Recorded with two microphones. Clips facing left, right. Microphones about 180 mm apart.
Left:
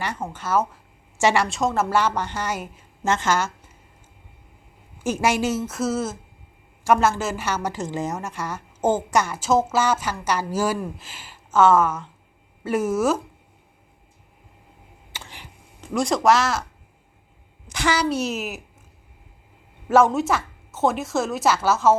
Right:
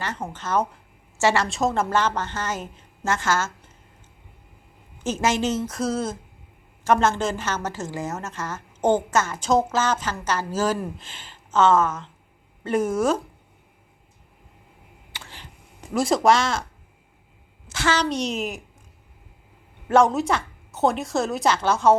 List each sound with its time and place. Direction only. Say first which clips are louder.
0.3 s a woman's voice: left 1 dB; 5° left (ahead or behind)
1.5 s a woman's voice: even; centre (ahead or behind); by 3.5 s 15° left (ahead or behind)
4.9 s a woman's voice: left 1 dB; 10° left (ahead or behind)
15.1 s a sound: left 2 dB; 15° left (ahead or behind)
16.0 s a woman's voice: even; centre (ahead or behind)
17.7 s a woman's voice: left 1 dB; 15° left (ahead or behind)
19.9 s a woman's voice: left 1 dB; centre (ahead or behind)